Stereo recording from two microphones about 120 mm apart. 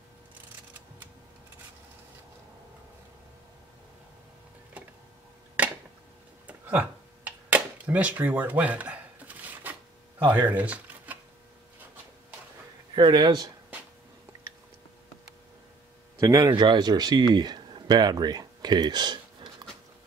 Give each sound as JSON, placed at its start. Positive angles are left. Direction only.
{"t": 5.6, "sound": "a sound", "side_deg": -10}
{"t": 12.9, "sound": "speech", "side_deg": -40}
{"t": 16.2, "sound": "speech", "side_deg": -35}